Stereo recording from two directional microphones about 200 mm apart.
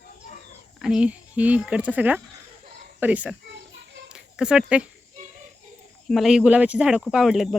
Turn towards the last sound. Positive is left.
turn(degrees=0)  # may be behind; listen again after turning